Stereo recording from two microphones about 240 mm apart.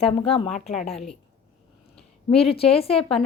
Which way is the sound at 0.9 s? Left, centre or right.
Centre.